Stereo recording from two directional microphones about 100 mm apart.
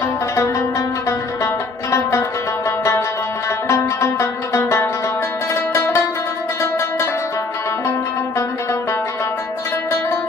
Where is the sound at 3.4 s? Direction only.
30° left (ahead or behind).